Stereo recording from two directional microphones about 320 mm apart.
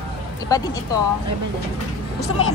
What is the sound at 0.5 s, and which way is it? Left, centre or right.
Speech, centre.